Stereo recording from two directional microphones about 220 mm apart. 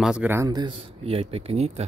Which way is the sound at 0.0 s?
5° right (ahead or behind).